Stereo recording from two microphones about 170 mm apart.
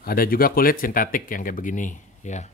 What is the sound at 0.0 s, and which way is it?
Speech, 60° left (ahead or behind).